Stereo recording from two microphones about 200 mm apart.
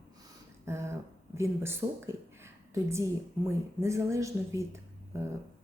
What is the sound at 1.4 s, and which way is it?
A woman's voice, 10° right (ahead or behind).